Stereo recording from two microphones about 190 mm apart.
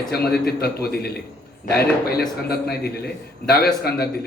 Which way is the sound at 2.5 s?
55° left (ahead or behind).